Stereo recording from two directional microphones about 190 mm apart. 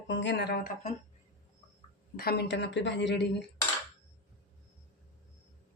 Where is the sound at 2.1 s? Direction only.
55° left (ahead or behind).